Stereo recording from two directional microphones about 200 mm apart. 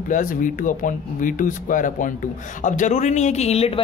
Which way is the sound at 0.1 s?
40° left (ahead or behind).